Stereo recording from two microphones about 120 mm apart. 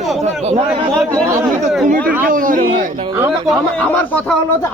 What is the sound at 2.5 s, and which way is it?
Speech, 90° right.